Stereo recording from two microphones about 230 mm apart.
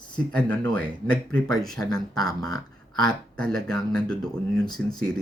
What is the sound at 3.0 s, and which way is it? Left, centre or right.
Speech, centre.